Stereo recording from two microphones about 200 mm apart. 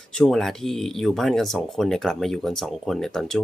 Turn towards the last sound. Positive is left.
turn(degrees=0)  # may be behind; listen again after turning